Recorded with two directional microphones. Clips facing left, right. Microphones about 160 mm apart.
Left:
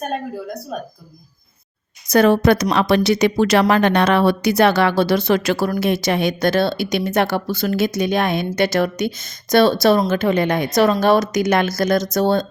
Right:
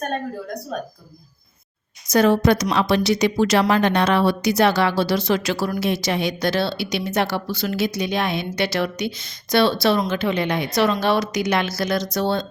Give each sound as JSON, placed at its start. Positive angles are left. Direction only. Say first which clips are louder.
{"t": 0.7, "sound": "speech", "louder": "even", "side_deg": 5}
{"t": 2.0, "sound": "a woman's voice", "louder": "left 3 dB", "side_deg": 60}